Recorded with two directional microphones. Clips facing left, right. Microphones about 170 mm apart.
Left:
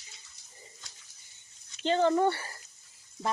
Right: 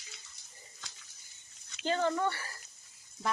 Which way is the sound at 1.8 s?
30° left (ahead or behind).